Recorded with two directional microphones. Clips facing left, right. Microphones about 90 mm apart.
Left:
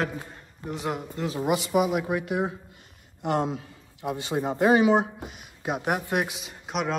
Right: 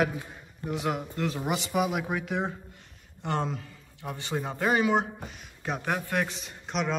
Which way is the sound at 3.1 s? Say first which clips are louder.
Left 4 dB; 15° left (ahead or behind).